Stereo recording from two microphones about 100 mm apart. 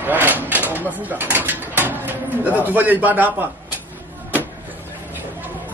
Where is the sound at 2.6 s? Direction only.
20° right (ahead or behind).